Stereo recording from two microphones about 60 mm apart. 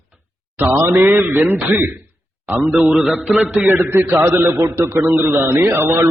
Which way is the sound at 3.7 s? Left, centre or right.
Right.